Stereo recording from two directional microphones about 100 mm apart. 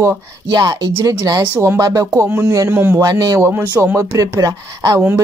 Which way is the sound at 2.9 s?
40° right (ahead or behind).